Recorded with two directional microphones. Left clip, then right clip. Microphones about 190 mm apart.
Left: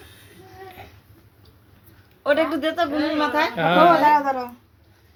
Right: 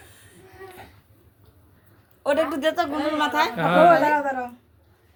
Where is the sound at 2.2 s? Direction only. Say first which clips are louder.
Left 2 dB; 45° right (ahead or behind).